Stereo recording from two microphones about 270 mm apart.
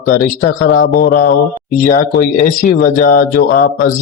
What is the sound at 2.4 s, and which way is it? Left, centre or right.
Speech, left.